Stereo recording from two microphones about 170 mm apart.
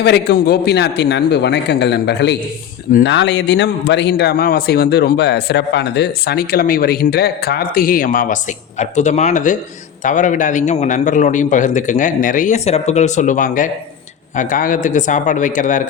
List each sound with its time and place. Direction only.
0.0 s a man's voice: 75° left (ahead or behind); by 15.8 s 50° left (ahead or behind)